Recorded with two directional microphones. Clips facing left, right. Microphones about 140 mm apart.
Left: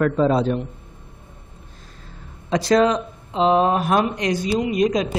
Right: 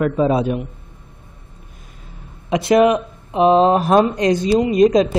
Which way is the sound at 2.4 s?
20° right (ahead or behind).